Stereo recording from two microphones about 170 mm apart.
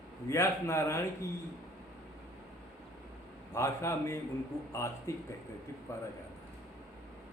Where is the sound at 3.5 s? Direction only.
15° left (ahead or behind).